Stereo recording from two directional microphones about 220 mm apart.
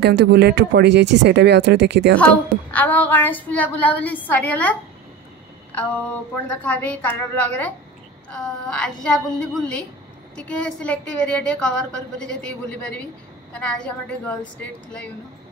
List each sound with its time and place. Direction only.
0.0 s speech: 50° right (ahead or behind)
2.1 s a woman's voice: 5° left (ahead or behind)
6.6 s a woman's voice: 5° left (ahead or behind)